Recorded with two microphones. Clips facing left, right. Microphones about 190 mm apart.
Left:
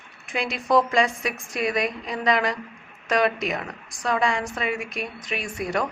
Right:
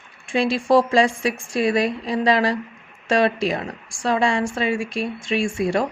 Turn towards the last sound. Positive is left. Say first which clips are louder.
# right 6 dB
turn(degrees=-25)  # may be behind; listen again after turning